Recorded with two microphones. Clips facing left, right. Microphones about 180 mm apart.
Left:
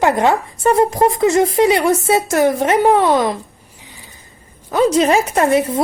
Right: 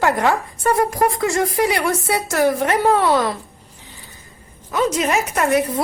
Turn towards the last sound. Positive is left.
turn(degrees=25)  # may be behind; listen again after turning